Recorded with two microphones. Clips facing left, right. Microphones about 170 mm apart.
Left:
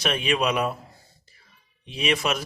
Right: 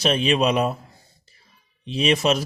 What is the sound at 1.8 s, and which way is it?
Speech, 30° right (ahead or behind).